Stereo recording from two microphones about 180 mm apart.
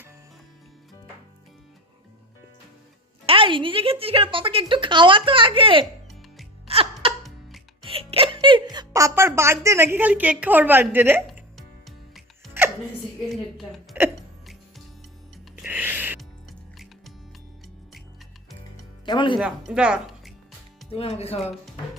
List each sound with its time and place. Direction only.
3.2 s speech: 30° right (ahead or behind)
6.7 s music: 30° right (ahead or behind); by 11.2 s 10° right (ahead or behind)
11.5 s music: centre (ahead or behind)
13.2 s hiccup: centre (ahead or behind)
15.6 s music: 10° right (ahead or behind)
19.0 s music: 25° left (ahead or behind)
19.4 s a woman's voice: 5° right (ahead or behind)
20.9 s speech: 35° left (ahead or behind)